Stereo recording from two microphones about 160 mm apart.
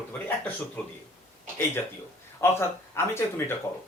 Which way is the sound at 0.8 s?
5° left (ahead or behind).